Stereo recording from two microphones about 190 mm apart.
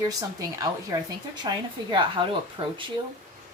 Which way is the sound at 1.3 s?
20° right (ahead or behind).